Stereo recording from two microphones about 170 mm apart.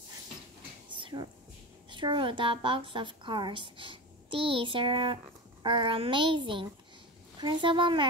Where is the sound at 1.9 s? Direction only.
30° right (ahead or behind).